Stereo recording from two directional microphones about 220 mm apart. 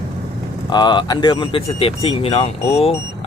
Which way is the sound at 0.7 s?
20° left (ahead or behind).